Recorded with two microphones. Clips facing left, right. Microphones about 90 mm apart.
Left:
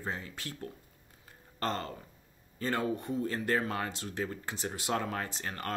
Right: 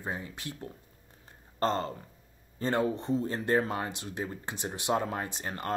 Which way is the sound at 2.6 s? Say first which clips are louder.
Right 3 dB; 25° right (ahead or behind).